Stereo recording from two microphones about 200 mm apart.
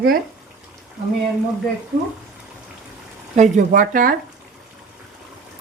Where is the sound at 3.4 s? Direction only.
40° right (ahead or behind).